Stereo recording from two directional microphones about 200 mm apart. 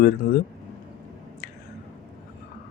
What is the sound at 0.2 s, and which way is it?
Speech, 45° left (ahead or behind).